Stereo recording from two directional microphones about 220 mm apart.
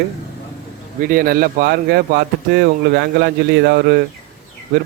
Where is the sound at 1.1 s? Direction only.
40° right (ahead or behind).